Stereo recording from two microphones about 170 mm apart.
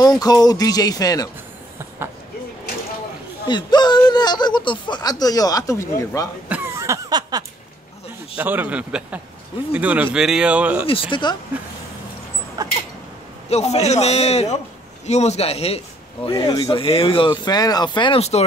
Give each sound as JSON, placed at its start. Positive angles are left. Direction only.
{"t": 0.0, "sound": "speech", "side_deg": 25}
{"t": 3.4, "sound": "speech", "side_deg": 25}
{"t": 6.5, "sound": "a sound", "side_deg": -15}
{"t": 8.4, "sound": "a man's voice", "side_deg": -10}
{"t": 10.9, "sound": "speech", "side_deg": 30}
{"t": 12.6, "sound": "a sound", "side_deg": -20}
{"t": 13.5, "sound": "speech", "side_deg": 40}